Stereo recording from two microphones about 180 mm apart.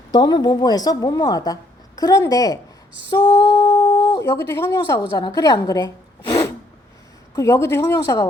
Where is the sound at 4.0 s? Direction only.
25° left (ahead or behind).